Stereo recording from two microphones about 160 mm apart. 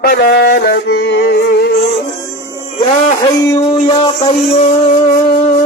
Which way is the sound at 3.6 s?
35° left (ahead or behind).